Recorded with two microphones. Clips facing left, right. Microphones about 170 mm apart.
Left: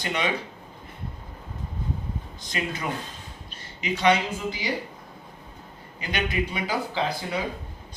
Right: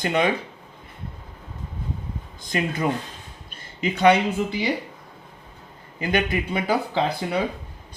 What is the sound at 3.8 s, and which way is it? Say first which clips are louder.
Speech: right 5 dB; 55° right (ahead or behind).